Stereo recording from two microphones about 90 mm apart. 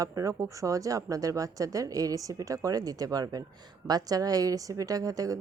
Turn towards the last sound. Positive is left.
turn(degrees=-40)  # may be behind; listen again after turning